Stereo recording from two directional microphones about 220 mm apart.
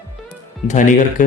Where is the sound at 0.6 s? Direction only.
35° left (ahead or behind).